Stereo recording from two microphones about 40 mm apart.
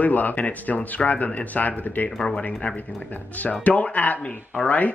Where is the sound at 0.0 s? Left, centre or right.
Left.